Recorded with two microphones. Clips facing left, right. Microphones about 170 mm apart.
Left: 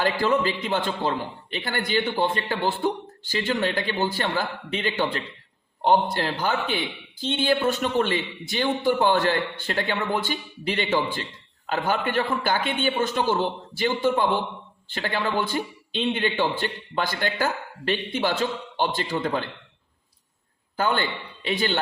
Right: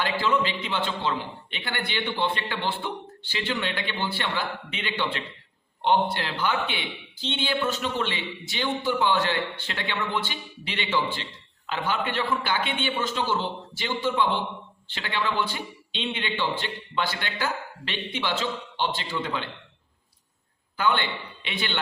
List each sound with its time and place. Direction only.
0.0 s a man's voice: 45° left (ahead or behind)
20.7 s a man's voice: 40° left (ahead or behind)